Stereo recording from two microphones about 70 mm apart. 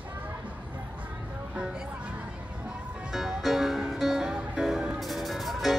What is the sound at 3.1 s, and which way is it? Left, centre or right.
Music, centre.